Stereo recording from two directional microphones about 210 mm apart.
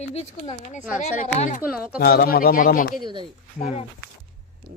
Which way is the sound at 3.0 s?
20° right (ahead or behind).